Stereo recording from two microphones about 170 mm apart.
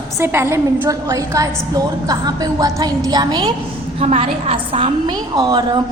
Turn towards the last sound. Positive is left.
turn(degrees=-25)  # may be behind; listen again after turning